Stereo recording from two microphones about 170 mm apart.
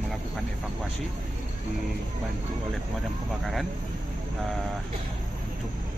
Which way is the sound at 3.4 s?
Centre (ahead or behind).